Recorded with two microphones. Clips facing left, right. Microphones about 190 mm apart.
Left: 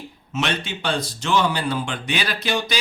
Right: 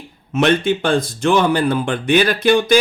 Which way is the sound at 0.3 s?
50° right (ahead or behind).